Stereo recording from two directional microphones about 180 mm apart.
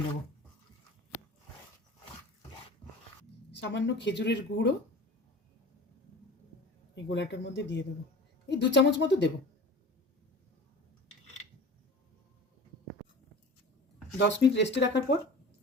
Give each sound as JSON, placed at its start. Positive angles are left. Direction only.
{"t": 3.5, "sound": "a woman's voice", "side_deg": 75}
{"t": 6.9, "sound": "a woman's voice", "side_deg": 75}
{"t": 14.2, "sound": "a woman's voice", "side_deg": 80}